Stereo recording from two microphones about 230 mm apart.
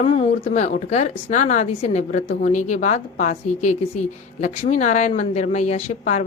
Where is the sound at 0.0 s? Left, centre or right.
Left.